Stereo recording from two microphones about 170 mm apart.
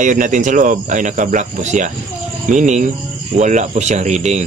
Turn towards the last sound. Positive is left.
turn(degrees=-45)  # may be behind; listen again after turning